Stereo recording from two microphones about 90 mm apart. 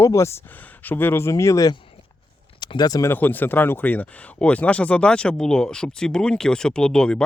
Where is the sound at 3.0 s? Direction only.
20° left (ahead or behind).